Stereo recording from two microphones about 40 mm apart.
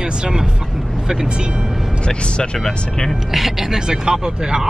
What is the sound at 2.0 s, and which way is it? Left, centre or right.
Speech, left.